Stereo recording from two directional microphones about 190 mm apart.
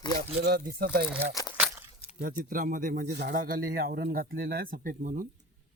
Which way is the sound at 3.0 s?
60° right (ahead or behind).